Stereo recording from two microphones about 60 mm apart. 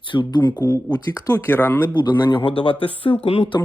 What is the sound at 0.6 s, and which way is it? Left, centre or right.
Speech, left.